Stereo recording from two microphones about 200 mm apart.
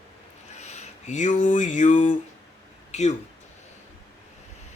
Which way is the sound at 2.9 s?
35° left (ahead or behind).